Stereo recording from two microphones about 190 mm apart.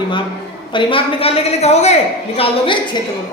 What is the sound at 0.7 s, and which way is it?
A woman's voice, 25° left (ahead or behind).